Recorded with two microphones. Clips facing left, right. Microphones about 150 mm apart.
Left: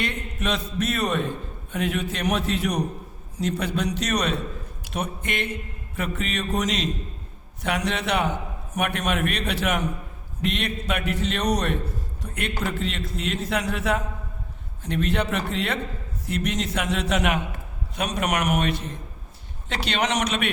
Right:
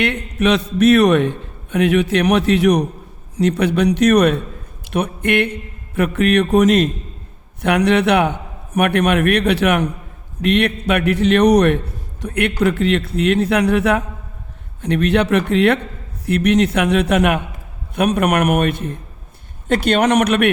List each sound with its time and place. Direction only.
0.0 s a man's voice: 70° right (ahead or behind)